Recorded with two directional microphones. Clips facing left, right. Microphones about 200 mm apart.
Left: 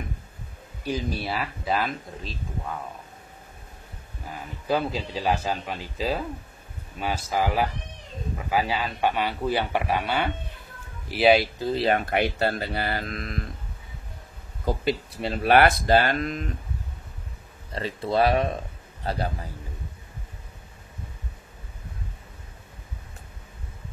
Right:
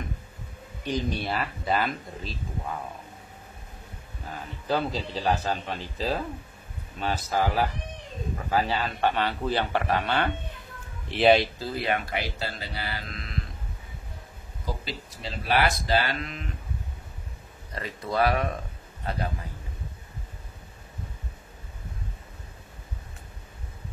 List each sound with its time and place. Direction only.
0.8 s speech: 5° left (ahead or behind)
4.6 s a man's voice: 10° left (ahead or behind)
11.5 s speech: 20° left (ahead or behind)
12.1 s speech: 60° left (ahead or behind)
14.6 s speech: 60° left (ahead or behind); by 16.5 s 40° left (ahead or behind)
17.7 s a man's voice: 30° left (ahead or behind)